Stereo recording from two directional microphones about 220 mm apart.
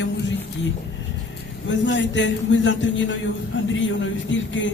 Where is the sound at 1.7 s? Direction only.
55° left (ahead or behind).